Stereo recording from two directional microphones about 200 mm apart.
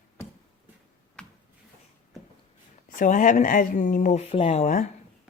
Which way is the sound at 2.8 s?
40° left (ahead or behind).